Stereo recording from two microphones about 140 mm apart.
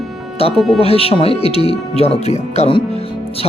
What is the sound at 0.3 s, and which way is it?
Speech, 45° left (ahead or behind).